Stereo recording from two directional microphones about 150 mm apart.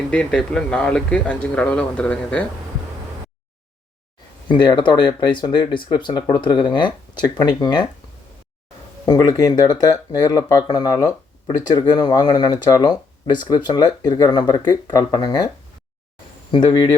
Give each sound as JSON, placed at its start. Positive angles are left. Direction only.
{"t": 0.1, "sound": "speech", "side_deg": 5}
{"t": 4.4, "sound": "speech", "side_deg": 30}
{"t": 9.0, "sound": "speech", "side_deg": 25}